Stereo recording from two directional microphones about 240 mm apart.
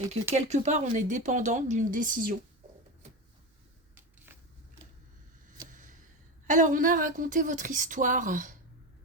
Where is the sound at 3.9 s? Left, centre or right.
Centre.